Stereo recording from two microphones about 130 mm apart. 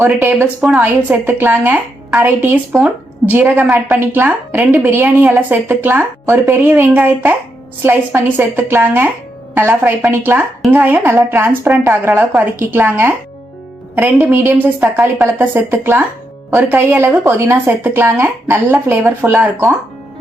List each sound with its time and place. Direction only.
0.2 s speech: 20° right (ahead or behind)